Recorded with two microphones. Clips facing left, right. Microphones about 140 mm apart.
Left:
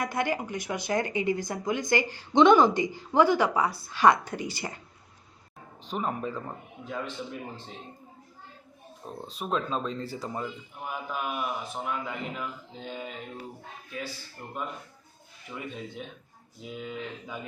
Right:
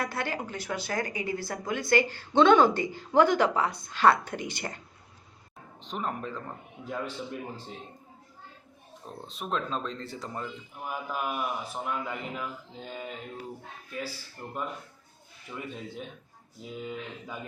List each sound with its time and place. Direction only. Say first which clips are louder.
0.0 s speech: left 3 dB; 15° left (ahead or behind)
5.8 s a man's voice: left 3 dB; 5° left (ahead or behind)
9.2 s a man's voice: left 2 dB; centre (ahead or behind)